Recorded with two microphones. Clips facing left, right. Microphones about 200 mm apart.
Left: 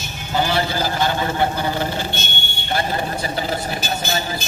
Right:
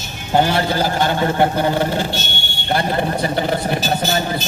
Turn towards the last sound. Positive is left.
turn(degrees=-55)  # may be behind; listen again after turning